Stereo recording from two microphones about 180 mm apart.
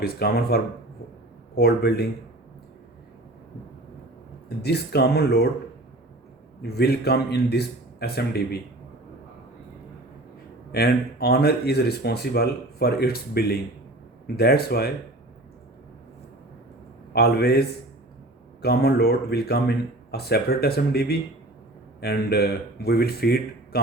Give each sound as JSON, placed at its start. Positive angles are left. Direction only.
{"t": 0.0, "sound": "speech", "side_deg": 60}
{"t": 4.4, "sound": "speech", "side_deg": 65}
{"t": 6.6, "sound": "speech", "side_deg": 65}
{"t": 10.7, "sound": "speech", "side_deg": 60}
{"t": 17.2, "sound": "speech", "side_deg": 60}